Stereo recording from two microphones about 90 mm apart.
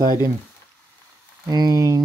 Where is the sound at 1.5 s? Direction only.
50° right (ahead or behind).